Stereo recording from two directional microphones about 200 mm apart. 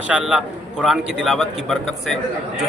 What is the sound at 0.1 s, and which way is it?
Speech, 5° right (ahead or behind).